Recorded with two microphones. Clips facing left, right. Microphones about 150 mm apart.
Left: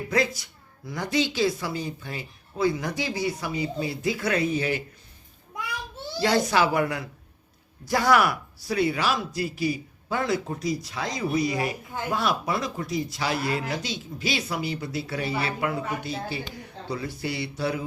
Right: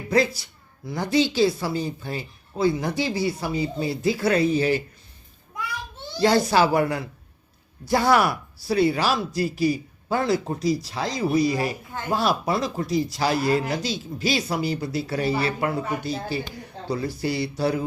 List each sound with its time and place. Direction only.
0.1 s speech: 30° right (ahead or behind)
6.2 s speech: 35° right (ahead or behind)